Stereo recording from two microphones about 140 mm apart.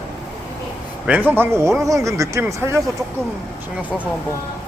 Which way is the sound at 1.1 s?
10° right (ahead or behind).